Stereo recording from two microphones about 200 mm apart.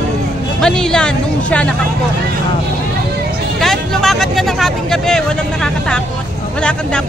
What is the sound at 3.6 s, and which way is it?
Vehicle, centre (ahead or behind).